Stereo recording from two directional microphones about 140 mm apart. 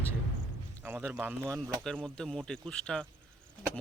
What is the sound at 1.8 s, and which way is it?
Speech, 5° left (ahead or behind).